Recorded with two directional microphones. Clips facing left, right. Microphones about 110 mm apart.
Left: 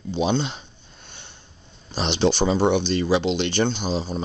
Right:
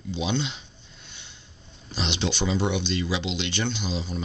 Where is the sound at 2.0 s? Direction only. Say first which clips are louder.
Left 7 dB; 40° left (ahead or behind).